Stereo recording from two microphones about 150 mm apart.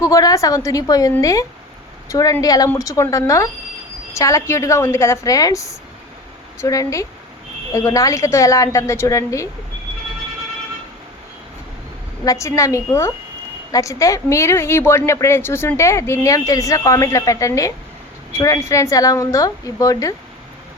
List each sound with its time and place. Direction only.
0.0 s speech: 25° left (ahead or behind)
12.2 s speech: 20° left (ahead or behind)